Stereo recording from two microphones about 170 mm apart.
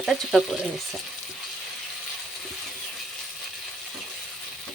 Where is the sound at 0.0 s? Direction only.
Centre (ahead or behind).